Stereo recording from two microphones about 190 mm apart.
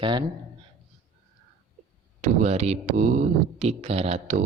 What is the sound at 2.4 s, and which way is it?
Speech, 35° right (ahead or behind).